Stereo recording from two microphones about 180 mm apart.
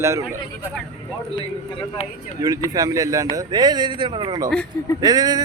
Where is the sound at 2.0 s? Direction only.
35° left (ahead or behind).